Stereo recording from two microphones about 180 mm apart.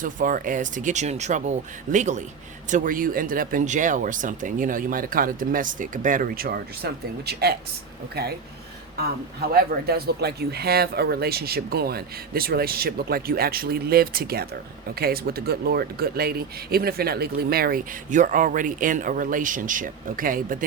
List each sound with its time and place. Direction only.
0.0 s speech: 50° right (ahead or behind)
9.5 s speech: 60° right (ahead or behind)